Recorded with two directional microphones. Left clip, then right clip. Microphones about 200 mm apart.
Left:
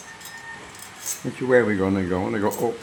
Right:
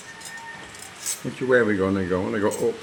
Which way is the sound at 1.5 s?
40° left (ahead or behind).